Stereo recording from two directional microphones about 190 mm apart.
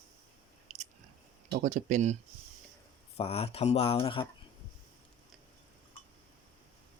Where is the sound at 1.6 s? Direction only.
40° right (ahead or behind).